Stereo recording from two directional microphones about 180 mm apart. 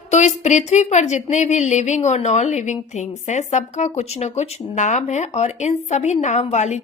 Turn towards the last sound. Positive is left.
turn(degrees=40)  # may be behind; listen again after turning